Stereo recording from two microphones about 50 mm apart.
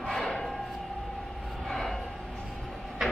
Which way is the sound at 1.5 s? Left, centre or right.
Centre.